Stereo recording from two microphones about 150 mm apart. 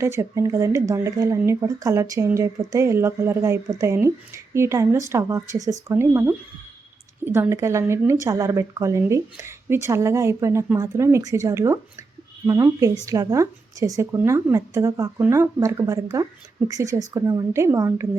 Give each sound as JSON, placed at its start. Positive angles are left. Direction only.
{"t": 0.0, "sound": "speech", "side_deg": -20}